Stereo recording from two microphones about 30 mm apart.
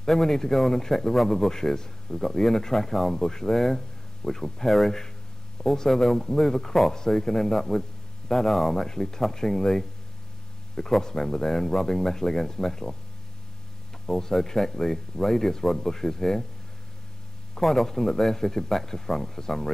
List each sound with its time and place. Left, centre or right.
0.0 s a man's voice: centre
14.0 s a man's voice: centre
17.6 s a man's voice: centre